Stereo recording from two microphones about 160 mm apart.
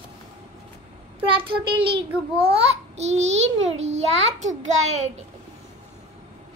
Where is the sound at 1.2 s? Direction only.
35° right (ahead or behind).